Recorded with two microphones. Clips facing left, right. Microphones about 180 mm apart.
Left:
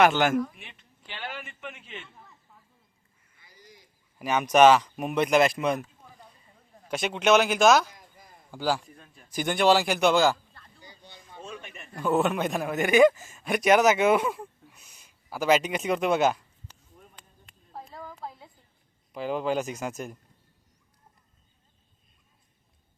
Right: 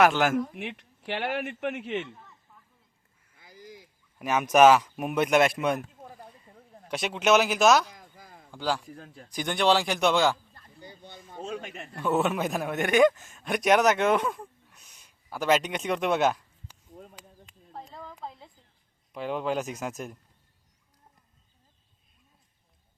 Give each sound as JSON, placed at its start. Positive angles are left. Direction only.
{"t": 0.0, "sound": "speech", "side_deg": 0}
{"t": 0.5, "sound": "a man's voice", "side_deg": -70}
{"t": 3.4, "sound": "duck", "side_deg": -90}
{"t": 3.8, "sound": "speech", "side_deg": 0}
{"t": 5.8, "sound": "a sound", "side_deg": -50}
{"t": 6.8, "sound": "speech", "side_deg": 0}
{"t": 10.8, "sound": "a sound", "side_deg": -55}
{"t": 11.4, "sound": "a man's voice", "side_deg": -70}
{"t": 11.9, "sound": "a man's voice", "side_deg": 0}
{"t": 17.9, "sound": "a sound", "side_deg": 5}
{"t": 19.1, "sound": "speech", "side_deg": 0}